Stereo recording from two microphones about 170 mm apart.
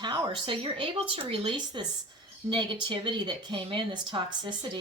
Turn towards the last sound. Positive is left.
turn(degrees=-25)  # may be behind; listen again after turning